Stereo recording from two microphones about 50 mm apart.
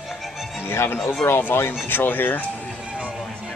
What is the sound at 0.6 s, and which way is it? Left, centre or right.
Speech, left.